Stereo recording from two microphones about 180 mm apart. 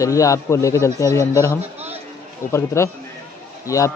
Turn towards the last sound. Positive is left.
turn(degrees=15)  # may be behind; listen again after turning